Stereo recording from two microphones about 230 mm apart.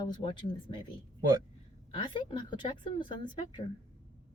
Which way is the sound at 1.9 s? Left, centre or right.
Left.